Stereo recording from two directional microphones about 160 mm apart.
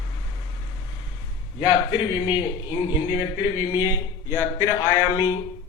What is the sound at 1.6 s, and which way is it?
A man's voice, 25° left (ahead or behind).